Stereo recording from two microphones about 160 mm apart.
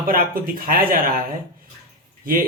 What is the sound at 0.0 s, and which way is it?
Speech, 65° right (ahead or behind).